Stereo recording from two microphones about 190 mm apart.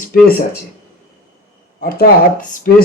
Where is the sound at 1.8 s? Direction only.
50° left (ahead or behind).